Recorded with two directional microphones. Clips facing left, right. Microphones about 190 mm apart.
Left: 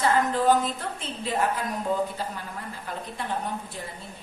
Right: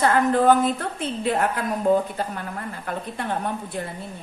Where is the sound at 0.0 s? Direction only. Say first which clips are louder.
Right 4 dB; 55° right (ahead or behind).